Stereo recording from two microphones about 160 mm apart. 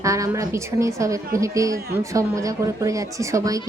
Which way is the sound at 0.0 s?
20° right (ahead or behind).